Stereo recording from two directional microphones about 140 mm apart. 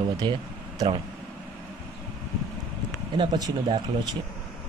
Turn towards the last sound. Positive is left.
turn(degrees=-30)  # may be behind; listen again after turning